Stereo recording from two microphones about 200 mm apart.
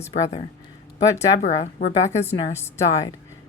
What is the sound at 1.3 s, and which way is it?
Speech, 35° left (ahead or behind).